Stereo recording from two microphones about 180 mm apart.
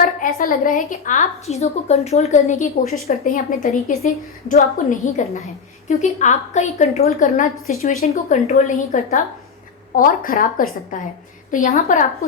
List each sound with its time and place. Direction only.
0.0 s a woman's voice: 50° left (ahead or behind)